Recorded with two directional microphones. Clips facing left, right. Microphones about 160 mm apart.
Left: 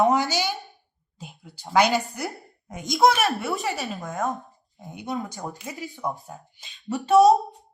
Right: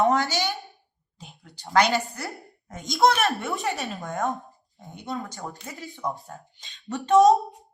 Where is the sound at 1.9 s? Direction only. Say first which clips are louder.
Left 1 dB; 20° left (ahead or behind).